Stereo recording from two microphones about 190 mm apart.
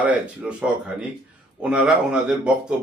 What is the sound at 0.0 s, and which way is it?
A man's voice, 5° right (ahead or behind).